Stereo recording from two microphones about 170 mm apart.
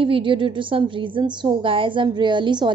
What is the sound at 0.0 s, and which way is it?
A woman's voice, 30° right (ahead or behind).